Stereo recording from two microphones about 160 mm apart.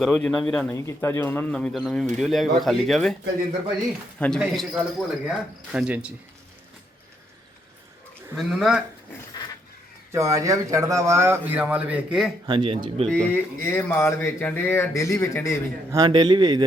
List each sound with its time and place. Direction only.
0.1 s speech: 5° left (ahead or behind)
0.8 s speech: 20° left (ahead or behind); by 3.2 s centre (ahead or behind)
4.4 s a man's voice: centre (ahead or behind)
8.4 s speech: centre (ahead or behind)
10.1 s a man's voice: 20° right (ahead or behind)
12.5 s speech: 30° right (ahead or behind)
13.1 s speech: 5° left (ahead or behind)
15.9 s a man's voice: 25° right (ahead or behind)